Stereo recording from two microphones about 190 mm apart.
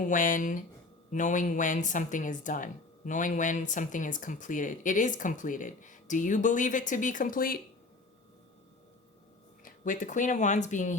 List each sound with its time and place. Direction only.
0.0 s speech: 45° left (ahead or behind)
9.6 s speech: 40° left (ahead or behind)